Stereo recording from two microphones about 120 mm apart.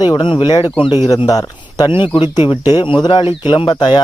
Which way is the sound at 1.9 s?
45° left (ahead or behind).